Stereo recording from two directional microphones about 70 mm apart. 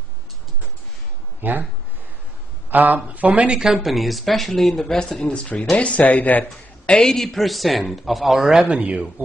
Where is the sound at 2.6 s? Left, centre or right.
Right.